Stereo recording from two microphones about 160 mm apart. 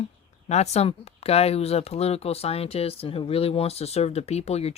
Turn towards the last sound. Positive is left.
turn(degrees=40)  # may be behind; listen again after turning